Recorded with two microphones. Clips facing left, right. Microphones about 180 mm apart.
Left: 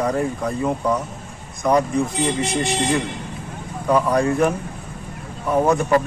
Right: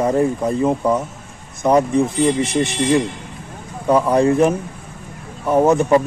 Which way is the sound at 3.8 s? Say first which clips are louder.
Right 4 dB; 25° right (ahead or behind).